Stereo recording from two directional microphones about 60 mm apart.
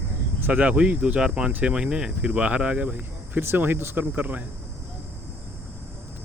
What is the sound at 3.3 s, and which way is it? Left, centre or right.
Insect, right.